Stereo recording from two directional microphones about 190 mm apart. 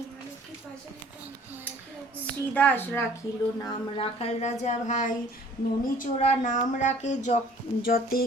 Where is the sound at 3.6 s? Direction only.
25° left (ahead or behind).